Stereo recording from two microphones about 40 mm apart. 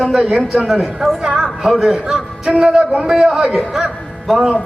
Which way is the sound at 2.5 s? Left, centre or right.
Right.